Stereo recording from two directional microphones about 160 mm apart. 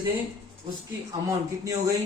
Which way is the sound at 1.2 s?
20° right (ahead or behind).